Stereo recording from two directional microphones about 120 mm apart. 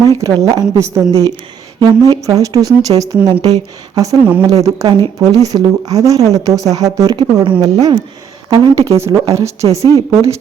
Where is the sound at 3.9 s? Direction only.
30° right (ahead or behind).